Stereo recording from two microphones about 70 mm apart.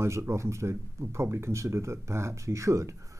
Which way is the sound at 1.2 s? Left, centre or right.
Right.